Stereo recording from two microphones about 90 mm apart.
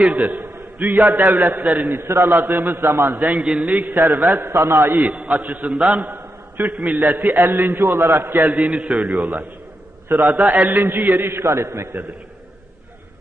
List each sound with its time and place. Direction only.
0.1 s a man's voice: 15° right (ahead or behind)
1.9 s a man's voice: 25° right (ahead or behind)
3.2 s a man's voice: 5° right (ahead or behind)
4.4 s a man's voice: 35° right (ahead or behind)
4.9 s a man's voice: 15° right (ahead or behind)
8.4 s a man's voice: 10° right (ahead or behind); by 12.0 s 25° right (ahead or behind)